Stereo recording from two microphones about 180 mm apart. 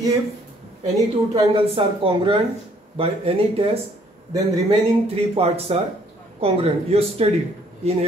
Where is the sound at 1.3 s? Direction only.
30° right (ahead or behind).